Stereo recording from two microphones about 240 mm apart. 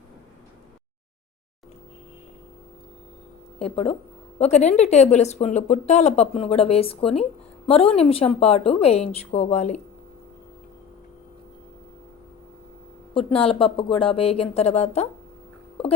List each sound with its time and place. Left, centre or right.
3.6 s speech: left
13.1 s speech: left